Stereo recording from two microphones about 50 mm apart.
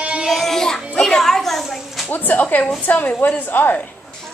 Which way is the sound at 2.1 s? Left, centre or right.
Left.